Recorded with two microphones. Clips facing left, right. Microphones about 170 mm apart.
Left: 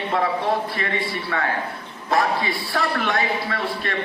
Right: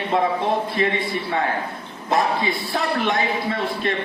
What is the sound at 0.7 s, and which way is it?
A man's voice, 20° right (ahead or behind).